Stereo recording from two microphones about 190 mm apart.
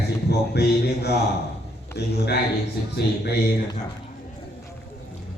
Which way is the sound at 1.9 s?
60° left (ahead or behind).